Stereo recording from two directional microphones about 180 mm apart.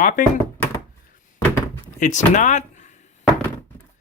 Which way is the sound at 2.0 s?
45° left (ahead or behind).